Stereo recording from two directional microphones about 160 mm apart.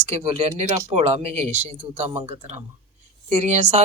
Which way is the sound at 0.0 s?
40° right (ahead or behind).